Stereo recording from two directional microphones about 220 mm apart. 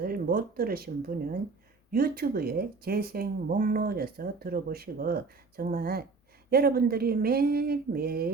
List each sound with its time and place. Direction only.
0.0 s speech: 40° right (ahead or behind)